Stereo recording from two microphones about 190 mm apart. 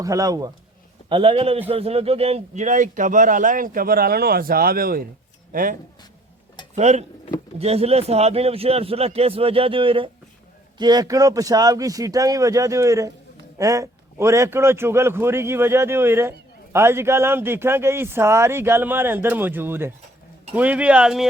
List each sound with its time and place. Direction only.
0.0 s a man's voice: 20° right (ahead or behind); by 5.7 s 50° right (ahead or behind)
6.7 s a man's voice: 35° right (ahead or behind); by 21.2 s 5° right (ahead or behind)